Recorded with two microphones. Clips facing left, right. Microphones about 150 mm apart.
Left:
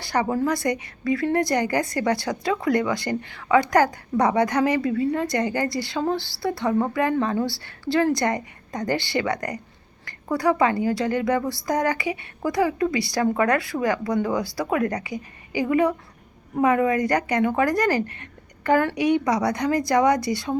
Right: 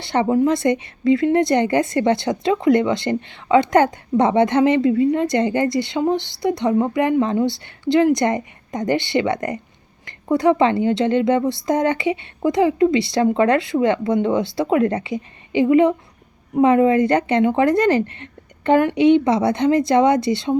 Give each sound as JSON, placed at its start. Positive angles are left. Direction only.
{"t": 0.0, "sound": "a woman's voice", "side_deg": -25}